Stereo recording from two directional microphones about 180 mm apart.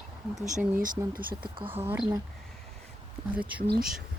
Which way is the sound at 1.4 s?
30° right (ahead or behind).